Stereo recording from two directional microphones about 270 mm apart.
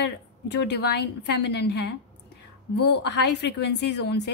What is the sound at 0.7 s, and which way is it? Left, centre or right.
A woman's voice, left.